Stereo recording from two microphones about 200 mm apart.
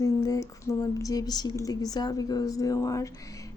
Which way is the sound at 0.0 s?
15° left (ahead or behind).